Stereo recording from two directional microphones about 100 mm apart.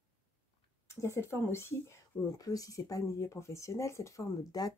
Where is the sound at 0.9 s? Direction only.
30° left (ahead or behind).